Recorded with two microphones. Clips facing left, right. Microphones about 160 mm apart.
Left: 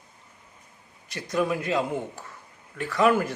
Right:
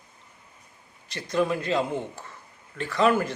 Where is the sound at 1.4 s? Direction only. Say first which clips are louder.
Right 1 dB; 10° left (ahead or behind).